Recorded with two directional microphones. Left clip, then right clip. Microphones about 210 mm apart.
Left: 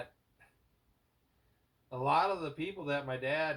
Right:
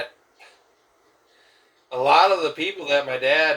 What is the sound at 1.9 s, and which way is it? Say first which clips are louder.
Speech: right 14 dB; 35° right (ahead or behind).